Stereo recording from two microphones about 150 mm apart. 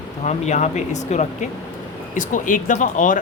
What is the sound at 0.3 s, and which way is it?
Speech, 50° left (ahead or behind).